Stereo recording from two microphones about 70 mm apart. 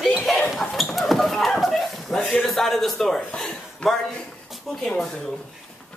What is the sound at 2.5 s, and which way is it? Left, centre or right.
Speech, centre.